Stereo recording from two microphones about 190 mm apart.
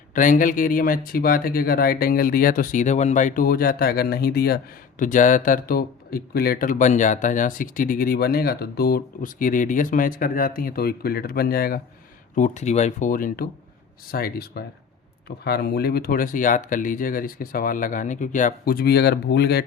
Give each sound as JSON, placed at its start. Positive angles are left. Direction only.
{"t": 0.1, "sound": "speech", "side_deg": 45}
{"t": 12.4, "sound": "speech", "side_deg": 35}